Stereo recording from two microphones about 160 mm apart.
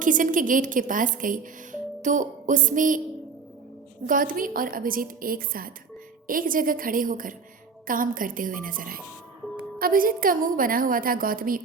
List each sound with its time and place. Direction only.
0.0 s speech: 55° right (ahead or behind)
4.0 s speech: 60° right (ahead or behind)